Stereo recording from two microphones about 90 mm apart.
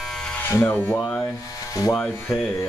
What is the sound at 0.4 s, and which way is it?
Speech, 25° left (ahead or behind).